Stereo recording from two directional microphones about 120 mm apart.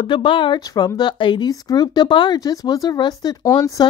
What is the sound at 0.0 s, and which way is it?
Speech, 45° left (ahead or behind).